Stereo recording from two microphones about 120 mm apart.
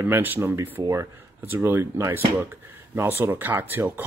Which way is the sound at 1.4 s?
15° right (ahead or behind).